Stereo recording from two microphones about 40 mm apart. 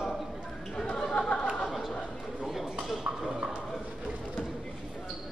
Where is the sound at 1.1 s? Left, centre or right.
Left.